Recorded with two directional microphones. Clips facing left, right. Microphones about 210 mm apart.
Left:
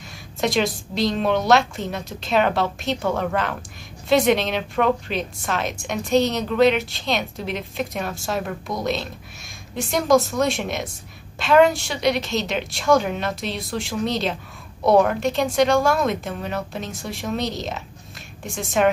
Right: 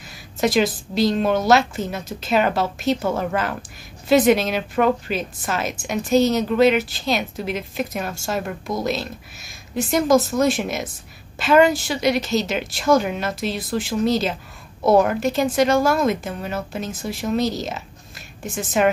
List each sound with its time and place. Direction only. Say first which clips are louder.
0.4 s a woman's voice: right 3 dB; centre (ahead or behind)